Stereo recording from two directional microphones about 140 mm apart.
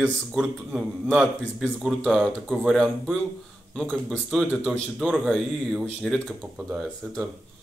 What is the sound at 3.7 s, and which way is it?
A man's voice, 5° left (ahead or behind).